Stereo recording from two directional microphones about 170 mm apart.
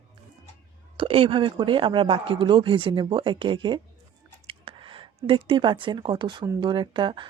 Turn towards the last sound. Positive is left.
turn(degrees=-30)  # may be behind; listen again after turning